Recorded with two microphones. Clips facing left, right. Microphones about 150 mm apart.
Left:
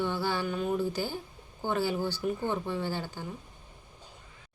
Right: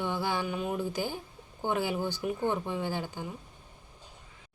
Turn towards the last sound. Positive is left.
turn(degrees=-15)  # may be behind; listen again after turning